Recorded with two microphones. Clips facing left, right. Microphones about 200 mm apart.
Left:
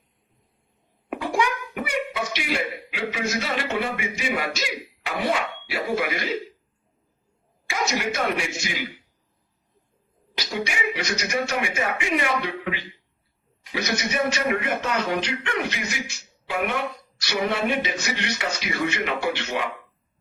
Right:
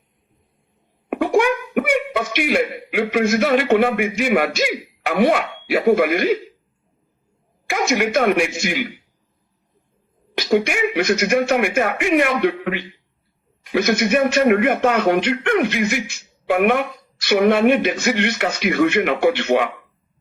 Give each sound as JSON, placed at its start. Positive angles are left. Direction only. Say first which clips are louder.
{"t": 1.1, "sound": "a child's voice", "louder": "right 8 dB", "side_deg": -60}
{"t": 7.7, "sound": "speech", "louder": "right 8 dB", "side_deg": -55}
{"t": 10.3, "sound": "speech", "louder": "right 11 dB", "side_deg": -55}